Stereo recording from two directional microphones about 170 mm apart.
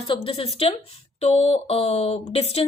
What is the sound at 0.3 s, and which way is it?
A woman's voice, 35° left (ahead or behind).